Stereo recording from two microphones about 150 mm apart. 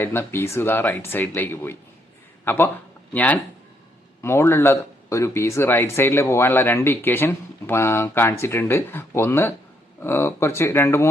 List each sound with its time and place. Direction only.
0.0 s speech: 15° left (ahead or behind)